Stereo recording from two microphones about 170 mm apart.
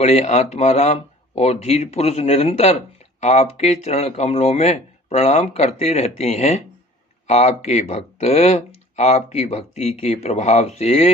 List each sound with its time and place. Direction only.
0.0 s speech: 40° left (ahead or behind)